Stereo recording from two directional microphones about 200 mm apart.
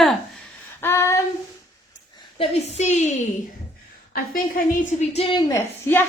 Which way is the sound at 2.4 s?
35° left (ahead or behind).